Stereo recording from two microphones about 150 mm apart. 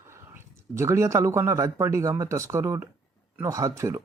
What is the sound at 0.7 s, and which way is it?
Speech, 20° right (ahead or behind).